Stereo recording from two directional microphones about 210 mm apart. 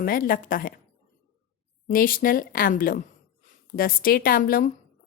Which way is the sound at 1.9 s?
40° left (ahead or behind).